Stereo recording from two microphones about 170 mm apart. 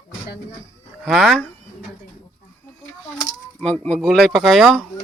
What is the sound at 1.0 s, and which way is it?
Speech, centre (ahead or behind).